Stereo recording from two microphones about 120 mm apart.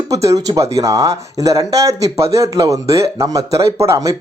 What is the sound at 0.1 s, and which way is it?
Speech, 25° right (ahead or behind).